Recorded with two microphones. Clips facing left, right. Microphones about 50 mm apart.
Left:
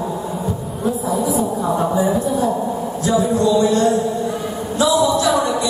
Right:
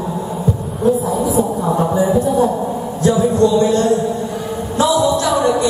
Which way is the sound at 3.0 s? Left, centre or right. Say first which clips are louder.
Right 4 dB; right.